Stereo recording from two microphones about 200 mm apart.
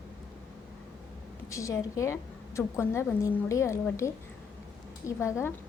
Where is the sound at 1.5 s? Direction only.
15° left (ahead or behind).